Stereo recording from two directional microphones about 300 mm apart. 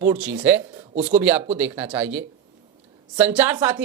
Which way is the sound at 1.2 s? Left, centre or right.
Centre.